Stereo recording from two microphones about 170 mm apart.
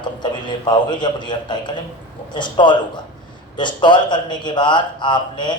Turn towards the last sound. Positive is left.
turn(degrees=25)  # may be behind; listen again after turning